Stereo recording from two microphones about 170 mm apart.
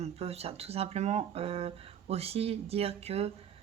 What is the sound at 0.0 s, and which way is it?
Speech, 35° right (ahead or behind).